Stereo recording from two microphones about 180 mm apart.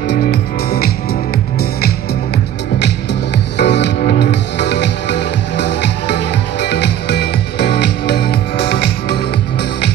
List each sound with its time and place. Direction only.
0.1 s music: 60° left (ahead or behind)
3.5 s music: 70° left (ahead or behind)